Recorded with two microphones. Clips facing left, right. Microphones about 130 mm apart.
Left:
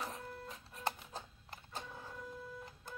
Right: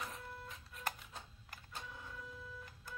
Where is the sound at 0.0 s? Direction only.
35° left (ahead or behind).